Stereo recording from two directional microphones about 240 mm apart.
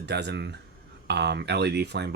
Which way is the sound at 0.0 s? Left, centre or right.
Right.